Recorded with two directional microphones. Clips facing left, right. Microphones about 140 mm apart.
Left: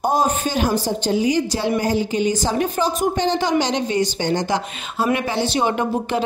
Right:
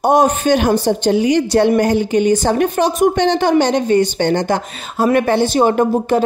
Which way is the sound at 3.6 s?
55° right (ahead or behind).